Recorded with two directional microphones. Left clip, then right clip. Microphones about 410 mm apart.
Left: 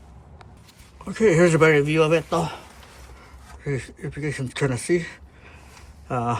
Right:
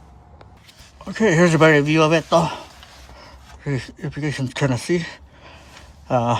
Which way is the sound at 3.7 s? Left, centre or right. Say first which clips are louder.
Right 2 dB; centre.